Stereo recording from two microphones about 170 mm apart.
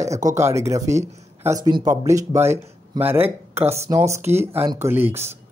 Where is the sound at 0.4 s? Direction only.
15° right (ahead or behind).